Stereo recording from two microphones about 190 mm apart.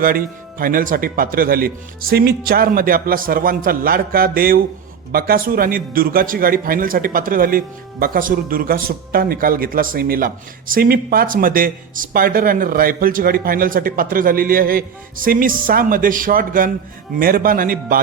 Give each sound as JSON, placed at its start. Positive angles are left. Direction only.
{"t": 0.6, "sound": "a man's voice", "side_deg": -50}